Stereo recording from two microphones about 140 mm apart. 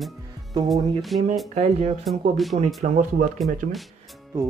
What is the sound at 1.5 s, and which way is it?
Speech, 50° right (ahead or behind).